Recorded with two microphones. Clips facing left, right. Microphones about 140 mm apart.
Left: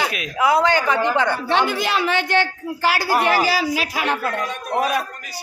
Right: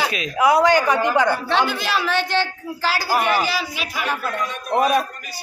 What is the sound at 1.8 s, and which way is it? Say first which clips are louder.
Speech: left 2 dB; 20° left (ahead or behind).